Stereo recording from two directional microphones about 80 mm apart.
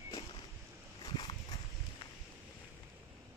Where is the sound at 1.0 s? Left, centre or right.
Left.